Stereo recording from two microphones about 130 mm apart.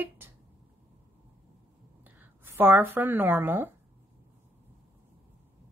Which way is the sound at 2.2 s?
15° right (ahead or behind).